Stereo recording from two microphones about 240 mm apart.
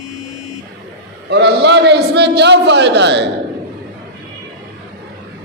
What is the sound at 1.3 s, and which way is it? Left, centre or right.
A man's voice, right.